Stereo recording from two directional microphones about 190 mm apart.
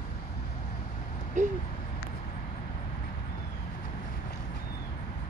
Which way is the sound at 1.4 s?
40° right (ahead or behind).